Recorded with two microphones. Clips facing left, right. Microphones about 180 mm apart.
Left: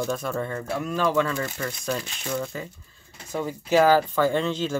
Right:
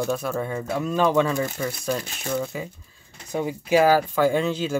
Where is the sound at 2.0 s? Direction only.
45° right (ahead or behind).